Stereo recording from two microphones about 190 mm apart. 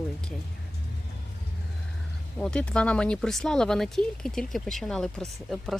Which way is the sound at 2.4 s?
5° left (ahead or behind).